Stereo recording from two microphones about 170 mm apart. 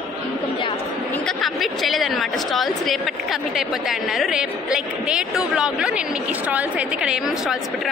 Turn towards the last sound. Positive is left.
turn(degrees=-5)  # may be behind; listen again after turning